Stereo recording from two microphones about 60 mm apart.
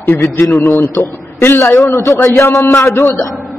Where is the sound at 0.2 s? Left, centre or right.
Left.